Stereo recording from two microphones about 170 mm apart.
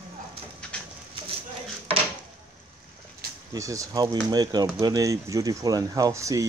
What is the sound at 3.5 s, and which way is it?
Speech, 20° right (ahead or behind).